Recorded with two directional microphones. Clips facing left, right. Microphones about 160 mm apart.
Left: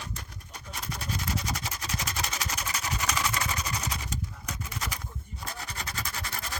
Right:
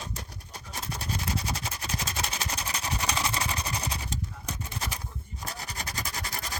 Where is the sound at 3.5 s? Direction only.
30° right (ahead or behind).